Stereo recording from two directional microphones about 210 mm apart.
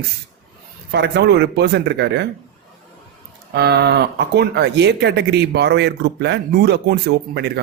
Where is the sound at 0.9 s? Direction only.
55° right (ahead or behind).